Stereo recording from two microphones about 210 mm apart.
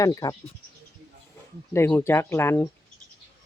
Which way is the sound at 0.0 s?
15° left (ahead or behind).